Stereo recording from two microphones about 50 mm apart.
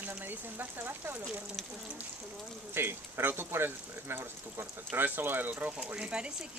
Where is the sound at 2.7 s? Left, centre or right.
Right.